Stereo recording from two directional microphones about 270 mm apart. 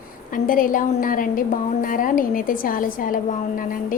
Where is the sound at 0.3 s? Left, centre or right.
Left.